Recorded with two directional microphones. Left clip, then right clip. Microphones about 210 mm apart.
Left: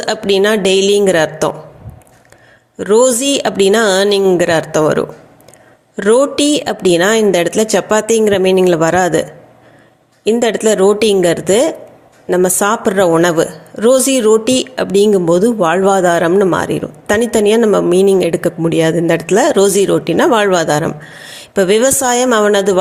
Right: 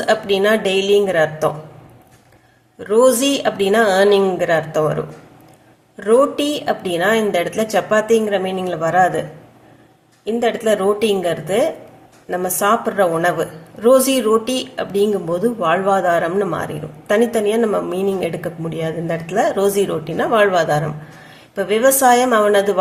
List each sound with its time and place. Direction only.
0.0 s a woman's voice: 40° left (ahead or behind)
2.7 s a woman's voice: 35° left (ahead or behind)
10.2 s a woman's voice: 40° left (ahead or behind)